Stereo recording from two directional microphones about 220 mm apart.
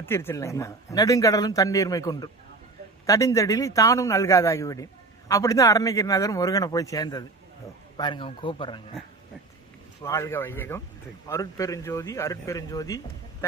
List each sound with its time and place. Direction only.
0.0 s a man's voice: 10° left (ahead or behind)
10.0 s a man's voice: 15° left (ahead or behind)